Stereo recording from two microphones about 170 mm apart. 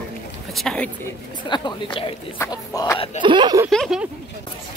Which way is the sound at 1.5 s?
25° left (ahead or behind).